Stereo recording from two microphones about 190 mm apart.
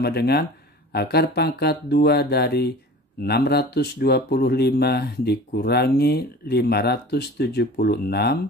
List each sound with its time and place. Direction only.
0.0 s speech: 55° left (ahead or behind)